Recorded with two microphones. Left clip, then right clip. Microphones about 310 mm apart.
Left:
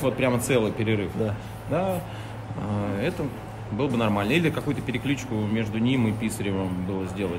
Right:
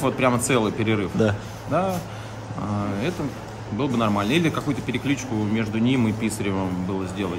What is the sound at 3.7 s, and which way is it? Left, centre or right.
Speech, centre.